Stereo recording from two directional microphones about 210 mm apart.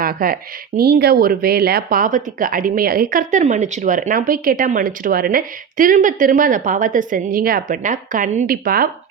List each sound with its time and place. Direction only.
0.0 s speech: 45° right (ahead or behind)